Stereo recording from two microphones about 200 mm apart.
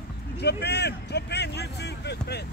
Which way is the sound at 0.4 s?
55° left (ahead or behind).